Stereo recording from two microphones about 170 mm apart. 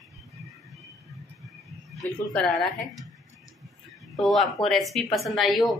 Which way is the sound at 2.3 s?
Centre (ahead or behind).